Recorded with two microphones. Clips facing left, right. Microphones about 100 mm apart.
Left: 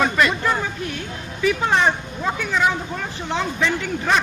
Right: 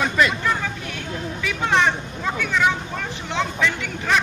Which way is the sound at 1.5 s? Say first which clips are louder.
Left 2 dB; 35° left (ahead or behind).